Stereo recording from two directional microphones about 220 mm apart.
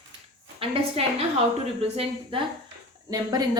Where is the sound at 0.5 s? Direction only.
25° right (ahead or behind).